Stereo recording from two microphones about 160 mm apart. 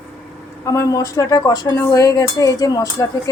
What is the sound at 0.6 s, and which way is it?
Speech, 20° left (ahead or behind).